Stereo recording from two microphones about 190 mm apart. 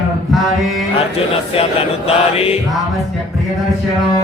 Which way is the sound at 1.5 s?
30° left (ahead or behind).